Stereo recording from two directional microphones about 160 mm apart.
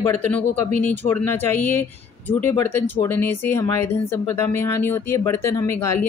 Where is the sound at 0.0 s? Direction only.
10° left (ahead or behind).